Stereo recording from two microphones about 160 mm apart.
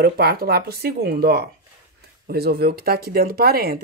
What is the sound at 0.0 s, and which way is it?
Speech, 80° right.